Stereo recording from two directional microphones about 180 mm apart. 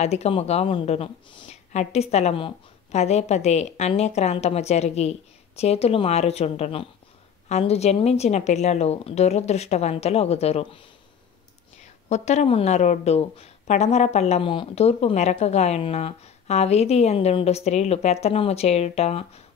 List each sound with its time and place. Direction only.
0.0 s a woman's voice: 35° left (ahead or behind)
12.1 s a woman's voice: 40° left (ahead or behind)